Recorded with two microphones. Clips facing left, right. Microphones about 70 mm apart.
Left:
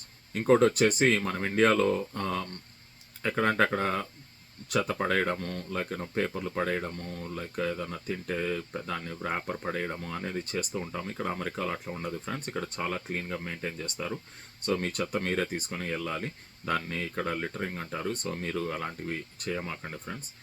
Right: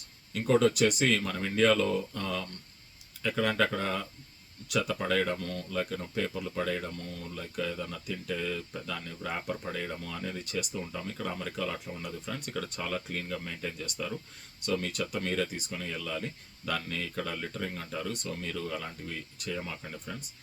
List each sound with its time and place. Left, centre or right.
0.3 s speech: left